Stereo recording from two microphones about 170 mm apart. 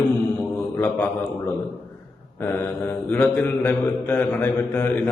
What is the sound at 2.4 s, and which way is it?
Mantra, 15° left (ahead or behind).